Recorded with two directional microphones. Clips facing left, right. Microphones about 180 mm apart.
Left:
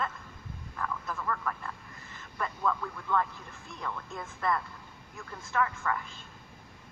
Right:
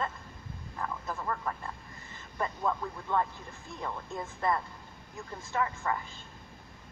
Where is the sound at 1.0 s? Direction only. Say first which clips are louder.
Right 1 dB; 20° right (ahead or behind).